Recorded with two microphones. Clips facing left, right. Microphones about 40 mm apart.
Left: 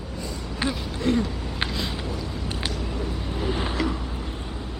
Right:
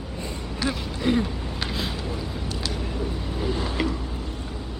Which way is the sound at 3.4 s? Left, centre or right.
Left.